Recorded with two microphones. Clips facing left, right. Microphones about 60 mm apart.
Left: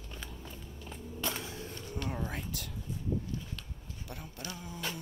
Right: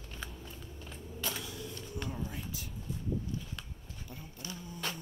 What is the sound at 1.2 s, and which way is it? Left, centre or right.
Skateboard, left.